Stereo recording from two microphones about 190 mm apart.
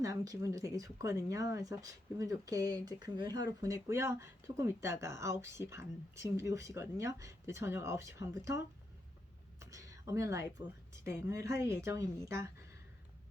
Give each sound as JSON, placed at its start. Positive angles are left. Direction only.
{"t": 0.0, "sound": "speech", "side_deg": -20}
{"t": 9.6, "sound": "a sound", "side_deg": -15}
{"t": 11.0, "sound": "speech", "side_deg": -15}